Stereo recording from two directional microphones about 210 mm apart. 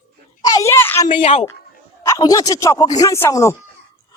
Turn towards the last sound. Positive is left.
turn(degrees=15)  # may be behind; listen again after turning